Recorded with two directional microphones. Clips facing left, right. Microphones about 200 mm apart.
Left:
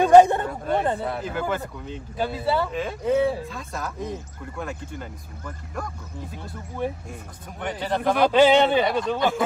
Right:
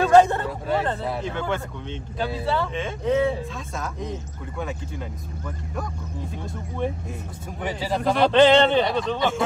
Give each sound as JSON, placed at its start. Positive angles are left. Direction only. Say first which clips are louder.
{"t": 0.0, "sound": "a sound", "louder": "left 2 dB", "side_deg": 15}
{"t": 0.5, "sound": "speech", "louder": "left 1 dB", "side_deg": 0}
{"t": 7.6, "sound": "speech", "louder": "even", "side_deg": 0}